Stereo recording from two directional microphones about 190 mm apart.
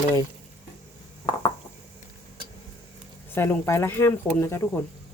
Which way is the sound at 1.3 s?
25° left (ahead or behind).